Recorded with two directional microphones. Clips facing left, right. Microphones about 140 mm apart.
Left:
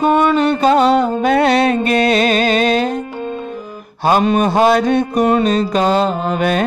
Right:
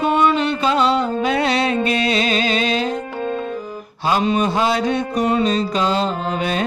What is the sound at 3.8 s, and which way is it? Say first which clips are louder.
Mantra: left 6 dB; 55° left (ahead or behind).